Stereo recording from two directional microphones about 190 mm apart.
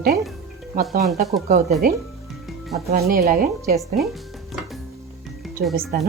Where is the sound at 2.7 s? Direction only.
55° right (ahead or behind).